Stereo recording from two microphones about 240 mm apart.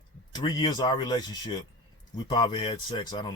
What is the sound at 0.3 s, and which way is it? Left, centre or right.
Speech, centre.